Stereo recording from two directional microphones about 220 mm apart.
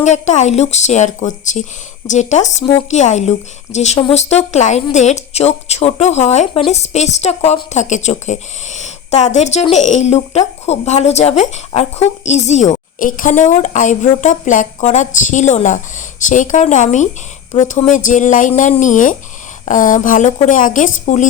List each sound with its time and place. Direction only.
0.0 s a woman's voice: 30° left (ahead or behind)